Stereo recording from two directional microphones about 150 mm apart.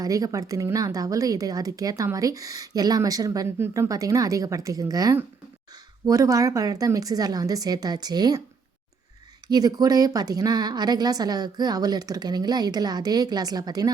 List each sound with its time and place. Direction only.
0.0 s speech: 25° right (ahead or behind)
9.5 s speech: 25° right (ahead or behind)